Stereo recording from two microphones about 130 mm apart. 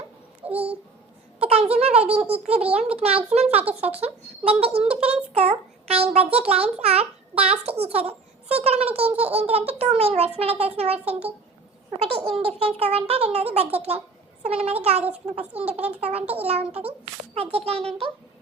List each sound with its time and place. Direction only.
0.5 s babbling: 50° right (ahead or behind)
1.4 s a child's voice: 50° right (ahead or behind)